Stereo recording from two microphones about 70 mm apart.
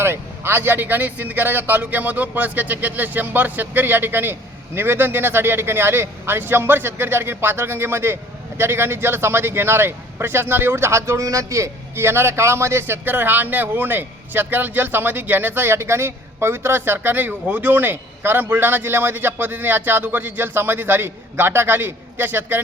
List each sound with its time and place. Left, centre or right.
0.0 s speech: right